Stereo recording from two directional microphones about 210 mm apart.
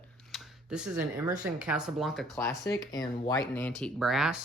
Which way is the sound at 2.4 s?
15° left (ahead or behind).